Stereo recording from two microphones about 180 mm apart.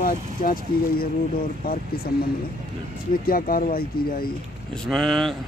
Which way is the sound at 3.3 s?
55° left (ahead or behind).